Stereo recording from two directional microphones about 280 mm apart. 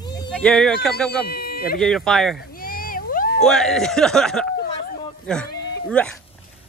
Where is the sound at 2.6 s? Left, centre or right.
Left.